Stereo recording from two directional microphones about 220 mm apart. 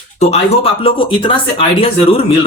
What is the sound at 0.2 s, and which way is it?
Speech, 30° left (ahead or behind).